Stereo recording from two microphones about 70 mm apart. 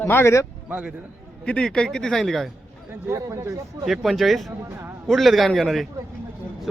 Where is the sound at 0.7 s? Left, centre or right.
Right.